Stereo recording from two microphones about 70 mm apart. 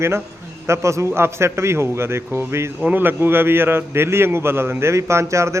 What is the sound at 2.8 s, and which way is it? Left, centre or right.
A man's voice, right.